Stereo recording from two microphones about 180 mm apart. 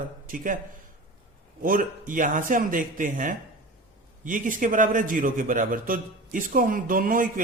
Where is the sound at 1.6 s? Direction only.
50° right (ahead or behind).